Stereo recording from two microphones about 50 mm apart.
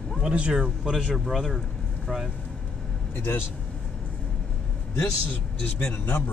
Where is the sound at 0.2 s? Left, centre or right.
Right.